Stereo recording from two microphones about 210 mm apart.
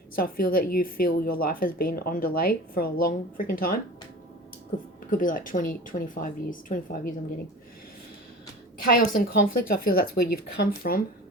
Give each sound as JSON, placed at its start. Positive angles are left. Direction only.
{"t": 0.2, "sound": "a woman's voice", "side_deg": 45}
{"t": 5.1, "sound": "speech", "side_deg": 40}
{"t": 8.9, "sound": "a woman's voice", "side_deg": 45}